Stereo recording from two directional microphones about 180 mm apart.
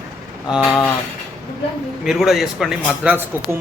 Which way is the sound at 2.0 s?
Centre (ahead or behind).